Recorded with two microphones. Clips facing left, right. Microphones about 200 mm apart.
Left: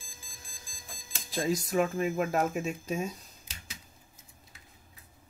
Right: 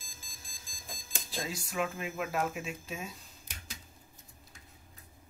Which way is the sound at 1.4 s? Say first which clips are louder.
Left 8 dB; 40° left (ahead or behind).